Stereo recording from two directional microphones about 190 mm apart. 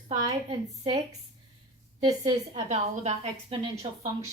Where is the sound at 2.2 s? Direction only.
35° right (ahead or behind).